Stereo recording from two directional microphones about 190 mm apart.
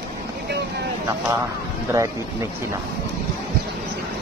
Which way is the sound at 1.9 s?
15° right (ahead or behind).